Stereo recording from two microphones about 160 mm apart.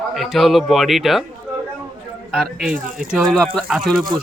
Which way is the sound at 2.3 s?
5° right (ahead or behind).